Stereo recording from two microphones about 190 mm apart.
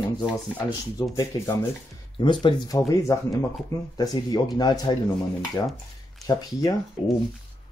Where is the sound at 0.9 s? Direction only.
20° left (ahead or behind).